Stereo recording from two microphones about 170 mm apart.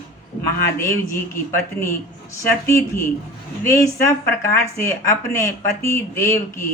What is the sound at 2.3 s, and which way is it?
Speech, 15° left (ahead or behind).